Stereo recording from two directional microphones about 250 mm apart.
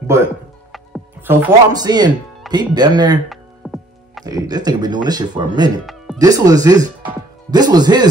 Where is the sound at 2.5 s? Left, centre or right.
Centre.